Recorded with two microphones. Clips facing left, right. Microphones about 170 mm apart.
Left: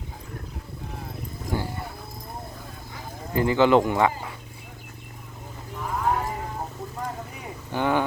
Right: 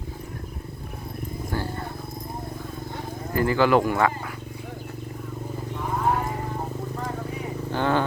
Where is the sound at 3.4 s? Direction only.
20° left (ahead or behind).